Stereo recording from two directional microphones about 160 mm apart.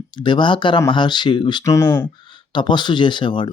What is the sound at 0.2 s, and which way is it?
Speech, 30° left (ahead or behind).